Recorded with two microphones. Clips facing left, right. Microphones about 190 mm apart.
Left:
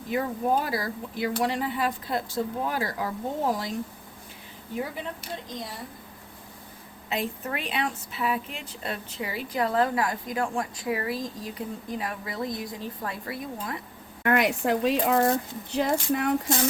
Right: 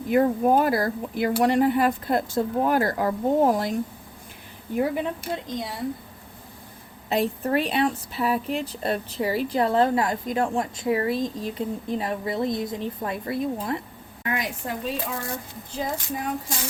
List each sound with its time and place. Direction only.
0.1 s speech: 50° right (ahead or behind)
7.1 s a woman's voice: 35° right (ahead or behind)
14.3 s speech: 65° left (ahead or behind)